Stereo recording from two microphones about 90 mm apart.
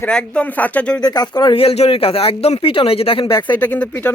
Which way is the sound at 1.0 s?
50° left (ahead or behind).